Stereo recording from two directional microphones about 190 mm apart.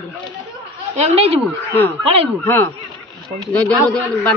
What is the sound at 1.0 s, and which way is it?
Speech, 35° right (ahead or behind).